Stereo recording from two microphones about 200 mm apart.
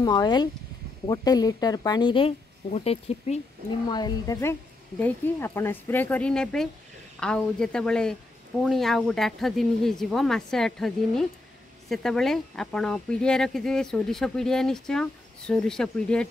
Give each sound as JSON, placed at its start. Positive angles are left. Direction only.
{"t": 0.0, "sound": "speech", "side_deg": 20}
{"t": 3.9, "sound": "a woman's voice", "side_deg": 20}